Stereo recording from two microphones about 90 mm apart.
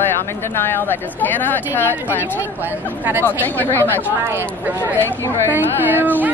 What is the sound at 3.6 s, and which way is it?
Speech, 25° left (ahead or behind).